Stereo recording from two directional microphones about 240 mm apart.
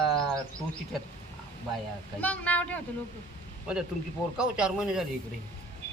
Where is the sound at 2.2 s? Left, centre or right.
Centre.